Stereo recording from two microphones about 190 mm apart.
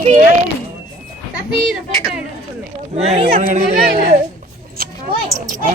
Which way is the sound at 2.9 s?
35° right (ahead or behind).